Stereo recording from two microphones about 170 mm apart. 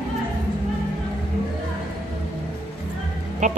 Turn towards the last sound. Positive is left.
turn(degrees=-45)  # may be behind; listen again after turning